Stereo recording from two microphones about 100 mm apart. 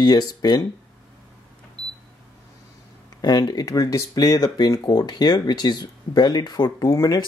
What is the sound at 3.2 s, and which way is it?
Speech, 45° left (ahead or behind).